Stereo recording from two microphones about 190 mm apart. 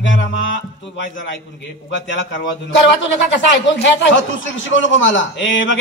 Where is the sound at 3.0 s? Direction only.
70° left (ahead or behind).